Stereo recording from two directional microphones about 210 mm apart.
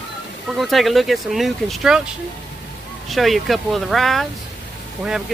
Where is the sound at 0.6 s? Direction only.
Centre (ahead or behind).